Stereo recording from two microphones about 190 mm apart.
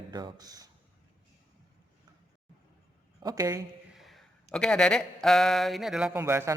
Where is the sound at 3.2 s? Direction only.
20° right (ahead or behind).